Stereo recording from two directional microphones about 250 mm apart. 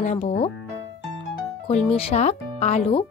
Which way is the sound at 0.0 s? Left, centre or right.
Left.